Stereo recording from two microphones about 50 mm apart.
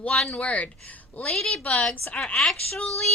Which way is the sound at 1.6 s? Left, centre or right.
Left.